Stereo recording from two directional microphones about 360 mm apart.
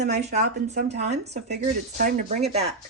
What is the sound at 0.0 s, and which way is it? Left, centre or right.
Speech, right.